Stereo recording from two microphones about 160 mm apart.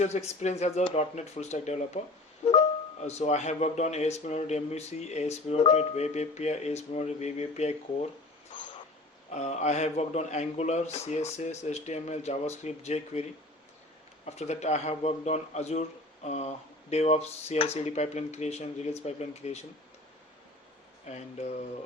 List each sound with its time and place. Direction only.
0.0 s speech: 45° left (ahead or behind)
9.3 s speech: 45° left (ahead or behind)
14.3 s speech: 45° left (ahead or behind)